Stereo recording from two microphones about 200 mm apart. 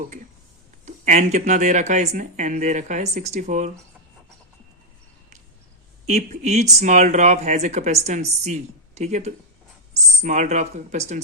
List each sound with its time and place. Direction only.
0.9 s speech: 35° right (ahead or behind)
6.1 s speech: 35° right (ahead or behind)